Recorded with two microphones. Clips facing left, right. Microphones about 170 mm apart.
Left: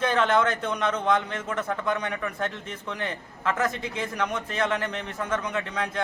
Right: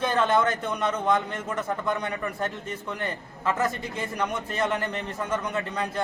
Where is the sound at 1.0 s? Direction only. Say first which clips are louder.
Even; centre (ahead or behind).